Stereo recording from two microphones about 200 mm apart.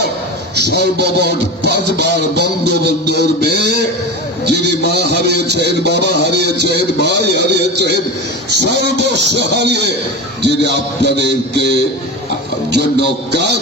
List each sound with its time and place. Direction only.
0.5 s music: 55° right (ahead or behind)